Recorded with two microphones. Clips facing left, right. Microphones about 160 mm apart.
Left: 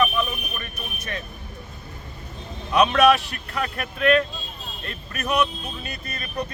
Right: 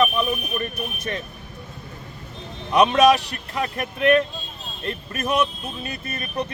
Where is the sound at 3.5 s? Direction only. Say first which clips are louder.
Right 2 dB; 20° right (ahead or behind).